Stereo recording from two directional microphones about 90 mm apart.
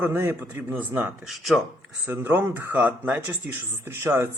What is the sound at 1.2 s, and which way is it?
Speech, centre (ahead or behind).